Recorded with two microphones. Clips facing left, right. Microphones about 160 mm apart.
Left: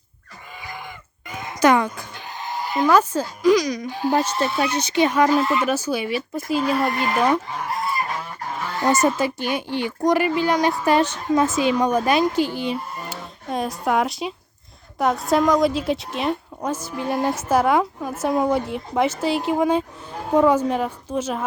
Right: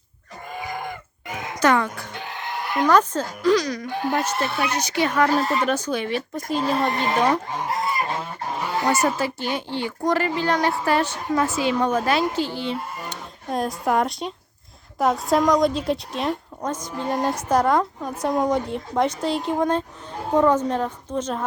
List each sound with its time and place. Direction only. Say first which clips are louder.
0.7 s chicken: right 4 dB; 50° right (ahead or behind)
1.3 s music: right 1 dB; 75° right (ahead or behind)
1.5 s a sound: left 3 dB; 15° left (ahead or behind)
2.1 s sheep: even; 65° right (ahead or behind)
2.8 s speech: left 1 dB; 5° left (ahead or behind)
3.8 s speech: left 3 dB; 60° right (ahead or behind)
4.7 s speech: left 3 dB; 25° left (ahead or behind)
5.3 s speech: left 2 dB; 40° right (ahead or behind)
5.6 s speech: left 1 dB; 5° left (ahead or behind)
6.6 s speech: left 1 dB; 30° right (ahead or behind)
7.6 s goose: right 1 dB; 20° right (ahead or behind)
8.9 s speech: left 4 dB; 20° left (ahead or behind)
13.5 s a woman's voice: even; centre (ahead or behind)